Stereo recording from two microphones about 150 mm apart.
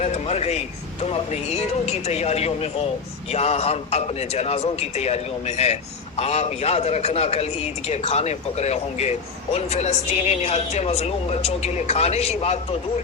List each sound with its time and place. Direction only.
0.0 s a man's voice: 45° left (ahead or behind)